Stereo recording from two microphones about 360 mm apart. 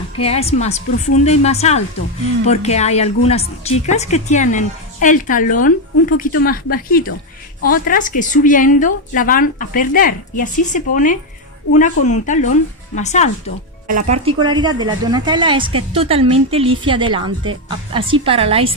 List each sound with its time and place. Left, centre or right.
0.2 s a woman's voice: centre
14.4 s a woman's voice: centre